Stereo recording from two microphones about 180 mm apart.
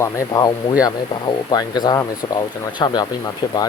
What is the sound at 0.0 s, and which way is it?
Speech, 20° left (ahead or behind).